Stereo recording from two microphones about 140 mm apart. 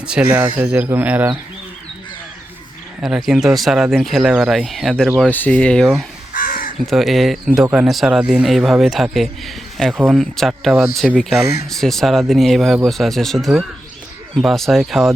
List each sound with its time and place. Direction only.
0.0 s speech: 10° right (ahead or behind)
3.0 s speech: 5° right (ahead or behind)
5.2 s speech: 10° left (ahead or behind)
6.3 s crow: 90° left
6.8 s speech: centre (ahead or behind)